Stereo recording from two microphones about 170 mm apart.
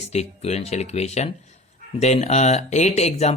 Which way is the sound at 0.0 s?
40° left (ahead or behind).